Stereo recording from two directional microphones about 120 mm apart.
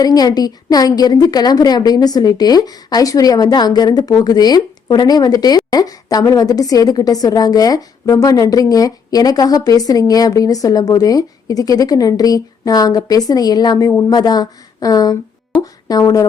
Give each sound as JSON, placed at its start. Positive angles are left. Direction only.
{"t": 0.0, "sound": "a woman's voice", "side_deg": 30}